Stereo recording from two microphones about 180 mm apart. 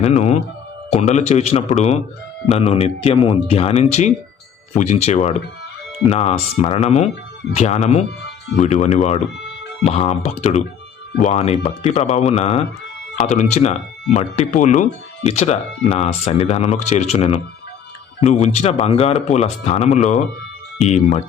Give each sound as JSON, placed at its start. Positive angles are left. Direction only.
{"t": 0.0, "sound": "speech", "side_deg": 35}